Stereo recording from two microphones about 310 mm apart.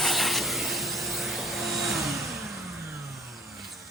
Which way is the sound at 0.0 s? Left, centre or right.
Centre.